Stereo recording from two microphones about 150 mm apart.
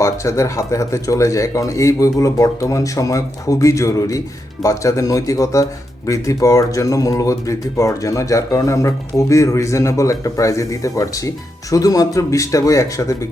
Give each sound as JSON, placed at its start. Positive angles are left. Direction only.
{"t": 0.0, "sound": "speech", "side_deg": 20}